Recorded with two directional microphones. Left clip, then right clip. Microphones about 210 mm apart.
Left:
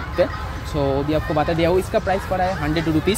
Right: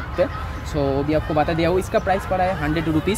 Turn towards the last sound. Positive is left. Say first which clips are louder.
# left 1 dB
turn(degrees=0)  # may be behind; listen again after turning